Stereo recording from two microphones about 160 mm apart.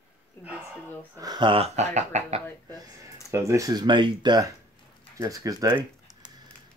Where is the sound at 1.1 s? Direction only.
25° right (ahead or behind); by 2.4 s 45° right (ahead or behind).